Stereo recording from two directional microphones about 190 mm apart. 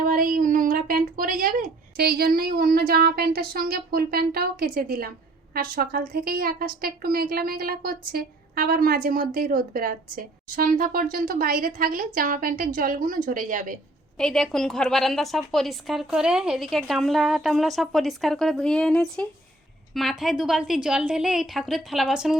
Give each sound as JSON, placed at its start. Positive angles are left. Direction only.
{"t": 0.0, "sound": "a woman's voice", "side_deg": -45}
{"t": 14.2, "sound": "a woman's voice", "side_deg": 0}